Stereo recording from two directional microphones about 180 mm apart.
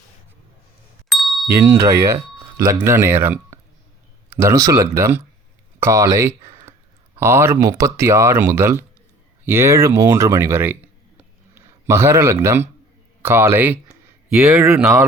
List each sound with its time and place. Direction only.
1.1 s ding: centre (ahead or behind)
1.6 s speech: 15° right (ahead or behind)
11.2 s a sound: 15° right (ahead or behind)
13.2 s speech: 10° right (ahead or behind)